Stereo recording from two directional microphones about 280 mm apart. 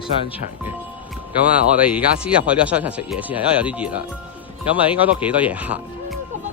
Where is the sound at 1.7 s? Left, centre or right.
Centre.